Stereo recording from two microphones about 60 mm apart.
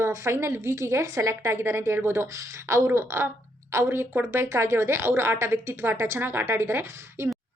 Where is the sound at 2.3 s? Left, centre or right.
Right.